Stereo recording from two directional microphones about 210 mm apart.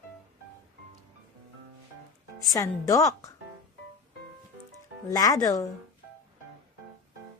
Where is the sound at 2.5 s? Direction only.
15° left (ahead or behind).